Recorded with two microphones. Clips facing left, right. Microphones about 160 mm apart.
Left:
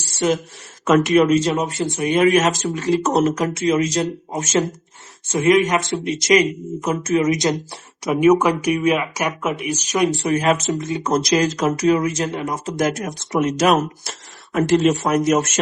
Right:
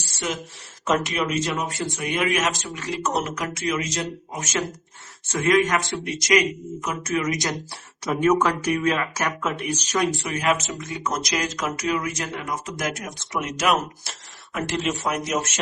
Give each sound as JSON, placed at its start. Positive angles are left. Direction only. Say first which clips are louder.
{"t": 0.9, "sound": "speech", "louder": "left 9 dB", "side_deg": 50}
{"t": 5.3, "sound": "speech", "louder": "left 4 dB", "side_deg": 20}
{"t": 10.2, "sound": "speech", "louder": "left 6 dB", "side_deg": 30}